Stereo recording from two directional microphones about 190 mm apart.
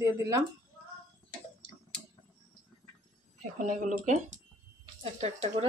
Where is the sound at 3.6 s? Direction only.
40° right (ahead or behind).